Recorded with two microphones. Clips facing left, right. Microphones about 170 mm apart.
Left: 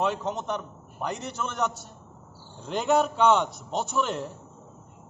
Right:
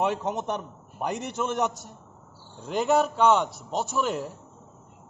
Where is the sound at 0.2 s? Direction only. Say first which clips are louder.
Right 1 dB; 20° right (ahead or behind).